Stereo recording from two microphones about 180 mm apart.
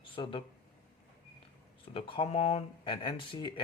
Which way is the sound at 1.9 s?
30° left (ahead or behind).